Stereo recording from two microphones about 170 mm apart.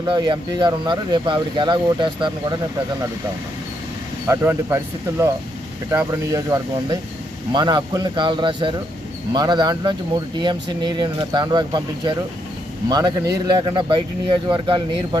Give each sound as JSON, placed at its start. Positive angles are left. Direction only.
{"t": 0.0, "sound": "speech", "side_deg": -25}
{"t": 4.3, "sound": "speech", "side_deg": -15}